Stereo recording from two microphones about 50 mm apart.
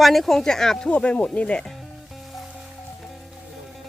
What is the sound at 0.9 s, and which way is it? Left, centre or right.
Speech, left.